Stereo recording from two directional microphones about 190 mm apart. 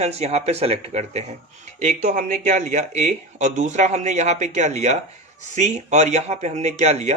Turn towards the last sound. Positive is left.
turn(degrees=-35)  # may be behind; listen again after turning